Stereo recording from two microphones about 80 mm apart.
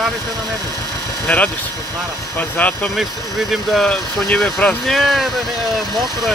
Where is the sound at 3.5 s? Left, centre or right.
Centre.